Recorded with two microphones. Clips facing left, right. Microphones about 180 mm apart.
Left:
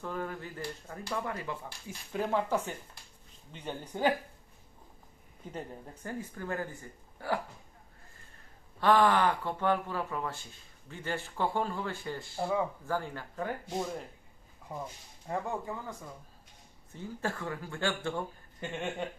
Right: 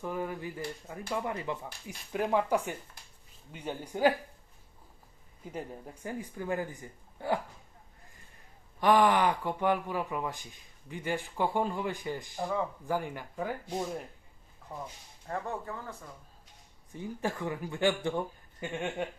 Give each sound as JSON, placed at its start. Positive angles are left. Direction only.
{"t": 0.0, "sound": "speech", "side_deg": -15}
{"t": 5.5, "sound": "speech", "side_deg": -10}
{"t": 8.8, "sound": "speech", "side_deg": -15}
{"t": 12.4, "sound": "speech", "side_deg": 10}
{"t": 12.8, "sound": "speech", "side_deg": -15}
{"t": 14.7, "sound": "speech", "side_deg": 5}
{"t": 16.9, "sound": "speech", "side_deg": -15}